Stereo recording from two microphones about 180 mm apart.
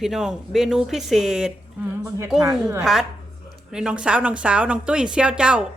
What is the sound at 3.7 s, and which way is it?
Speech, 5° right (ahead or behind).